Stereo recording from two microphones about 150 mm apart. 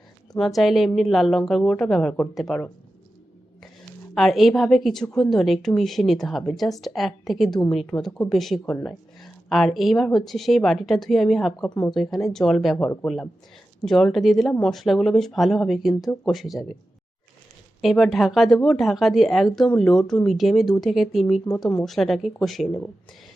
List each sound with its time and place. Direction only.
0.3 s a woman's voice: centre (ahead or behind)
4.1 s a woman's voice: centre (ahead or behind)
17.8 s a woman's voice: centre (ahead or behind)